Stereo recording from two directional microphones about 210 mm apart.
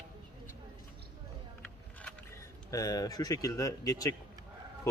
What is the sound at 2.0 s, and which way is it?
A man's voice, 5° left (ahead or behind).